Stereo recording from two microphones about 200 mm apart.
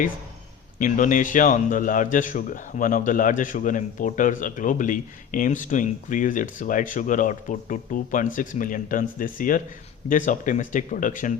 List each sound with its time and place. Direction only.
0.8 s a man's voice: 40° left (ahead or behind)